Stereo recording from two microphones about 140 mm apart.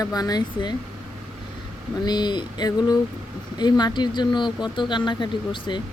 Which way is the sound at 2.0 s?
30° left (ahead or behind).